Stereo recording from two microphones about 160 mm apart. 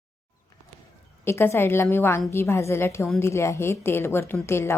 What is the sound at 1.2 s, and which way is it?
A woman's voice, 15° left (ahead or behind).